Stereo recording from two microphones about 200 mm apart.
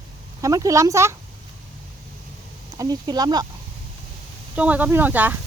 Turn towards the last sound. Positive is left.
turn(degrees=-10)  # may be behind; listen again after turning